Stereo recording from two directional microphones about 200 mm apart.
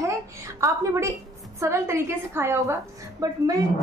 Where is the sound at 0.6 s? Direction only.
15° right (ahead or behind).